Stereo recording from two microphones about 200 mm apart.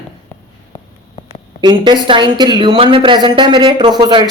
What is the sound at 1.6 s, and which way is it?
A woman's voice, 20° right (ahead or behind).